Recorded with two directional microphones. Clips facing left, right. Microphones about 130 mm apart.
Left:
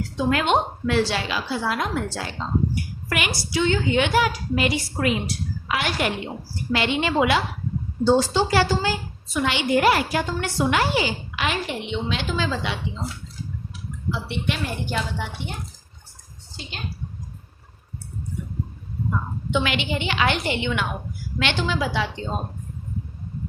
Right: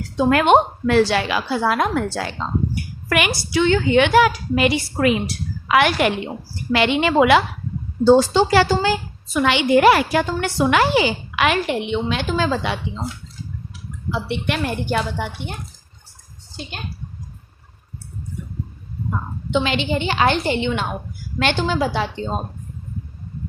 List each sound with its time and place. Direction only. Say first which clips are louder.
0.2 s a woman's voice: right 7 dB; 55° right (ahead or behind)
3.1 s a woman's voice: right 6 dB; 70° right (ahead or behind)
8.0 s a woman's voice: right 6 dB; 85° right; by 12.7 s 50° right (ahead or behind)
14.1 s a woman's voice: right 4 dB; 60° right (ahead or behind)
19.5 s a woman's voice: right 4 dB; 25° right (ahead or behind)